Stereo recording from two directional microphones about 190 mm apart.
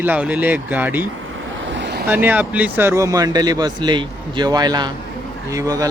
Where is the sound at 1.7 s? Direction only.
65° right (ahead or behind).